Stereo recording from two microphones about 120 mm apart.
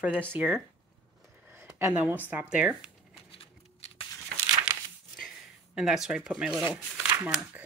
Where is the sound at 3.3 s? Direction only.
55° left (ahead or behind).